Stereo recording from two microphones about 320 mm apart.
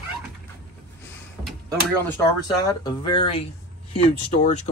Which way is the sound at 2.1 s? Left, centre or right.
Centre.